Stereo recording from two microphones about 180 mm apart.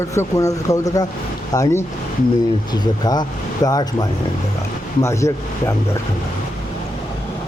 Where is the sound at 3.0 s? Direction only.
20° left (ahead or behind).